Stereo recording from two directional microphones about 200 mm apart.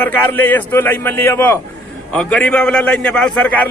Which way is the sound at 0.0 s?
10° left (ahead or behind).